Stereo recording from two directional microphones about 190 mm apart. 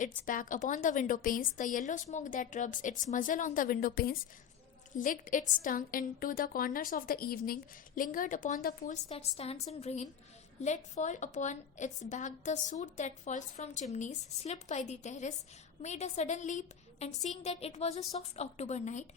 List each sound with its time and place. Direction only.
0.3 s a woman's voice: 45° left (ahead or behind)
9.0 s a woman's voice: 30° left (ahead or behind)